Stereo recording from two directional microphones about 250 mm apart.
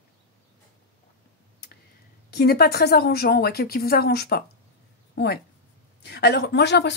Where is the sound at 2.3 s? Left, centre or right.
Left.